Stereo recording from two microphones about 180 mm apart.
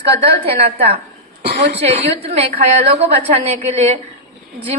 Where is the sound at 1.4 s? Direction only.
70° right (ahead or behind).